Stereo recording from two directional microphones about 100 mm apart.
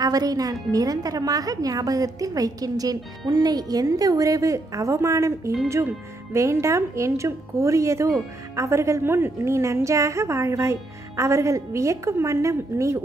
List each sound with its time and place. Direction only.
0.0 s a woman's voice: 40° right (ahead or behind)